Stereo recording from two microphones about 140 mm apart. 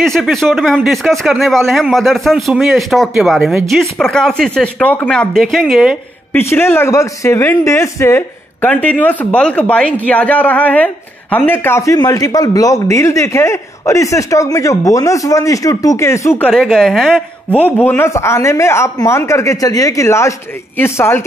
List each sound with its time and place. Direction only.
0.0 s a man's voice: centre (ahead or behind)
6.5 s speech: 15° left (ahead or behind)
17.7 s speech: 15° left (ahead or behind)